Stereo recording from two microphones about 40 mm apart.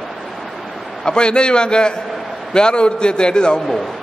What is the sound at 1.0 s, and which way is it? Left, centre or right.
A man's voice, left.